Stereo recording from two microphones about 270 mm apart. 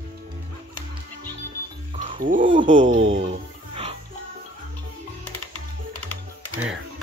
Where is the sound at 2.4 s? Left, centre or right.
Centre.